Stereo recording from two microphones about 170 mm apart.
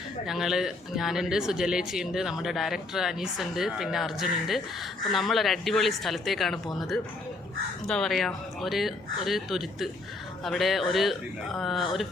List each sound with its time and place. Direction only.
0.3 s a man's voice: centre (ahead or behind)